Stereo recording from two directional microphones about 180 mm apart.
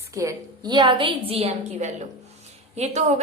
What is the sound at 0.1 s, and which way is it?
A woman's voice, 15° right (ahead or behind).